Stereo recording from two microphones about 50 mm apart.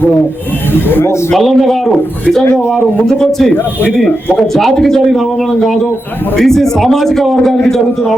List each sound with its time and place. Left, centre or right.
0.7 s speech: left
1.3 s speech: centre
3.1 s a man's voice: centre